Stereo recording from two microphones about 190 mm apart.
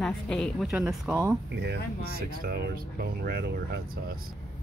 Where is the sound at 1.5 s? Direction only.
65° right (ahead or behind).